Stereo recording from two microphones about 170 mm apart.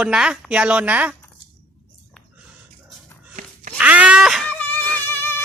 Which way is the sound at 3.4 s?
45° right (ahead or behind).